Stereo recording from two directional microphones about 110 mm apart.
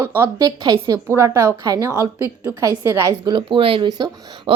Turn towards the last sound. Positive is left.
turn(degrees=-55)  # may be behind; listen again after turning